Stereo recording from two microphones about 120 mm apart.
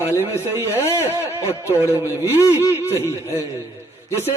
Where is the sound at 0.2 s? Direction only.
20° right (ahead or behind).